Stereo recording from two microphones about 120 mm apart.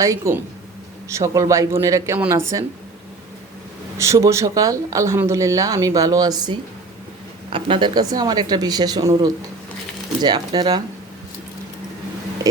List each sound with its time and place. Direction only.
0.0 s speech: 25° right (ahead or behind)
3.9 s speech: 25° right (ahead or behind)